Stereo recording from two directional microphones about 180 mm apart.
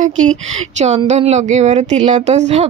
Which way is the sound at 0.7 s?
40° right (ahead or behind).